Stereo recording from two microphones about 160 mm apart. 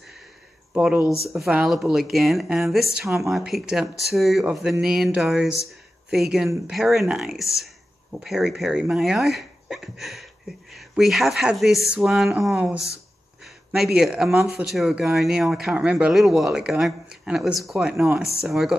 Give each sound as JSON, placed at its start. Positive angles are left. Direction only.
{"t": 0.7, "sound": "speech", "side_deg": -10}
{"t": 13.4, "sound": "a sound", "side_deg": 0}
{"t": 14.6, "sound": "speech", "side_deg": 0}